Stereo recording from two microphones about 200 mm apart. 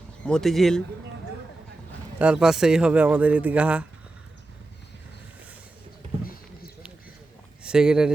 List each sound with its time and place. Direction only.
0.3 s speech: 5° left (ahead or behind)
2.1 s speech: 5° right (ahead or behind)
6.2 s a sound: 45° left (ahead or behind)
7.6 s speech: 5° right (ahead or behind)